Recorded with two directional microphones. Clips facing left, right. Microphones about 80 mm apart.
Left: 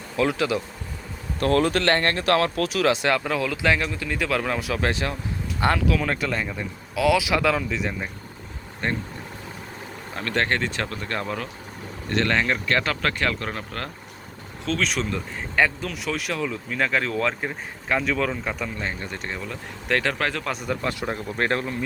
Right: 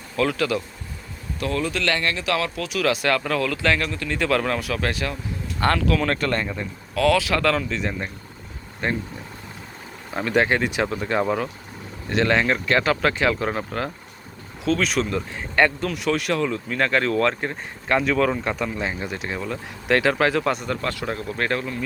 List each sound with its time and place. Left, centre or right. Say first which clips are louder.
0.2 s speech: even; centre
1.4 s a man's voice: left 5 dB; left
1.8 s speech: left 2 dB; left; by 4.6 s centre
4.6 s speech: even; left
5.5 s speech: right 1 dB; centre
10.2 s speech: right 4 dB; centre
20.7 s speech: even; centre